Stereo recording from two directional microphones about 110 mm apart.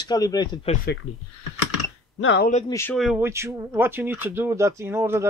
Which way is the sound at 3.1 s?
25° right (ahead or behind).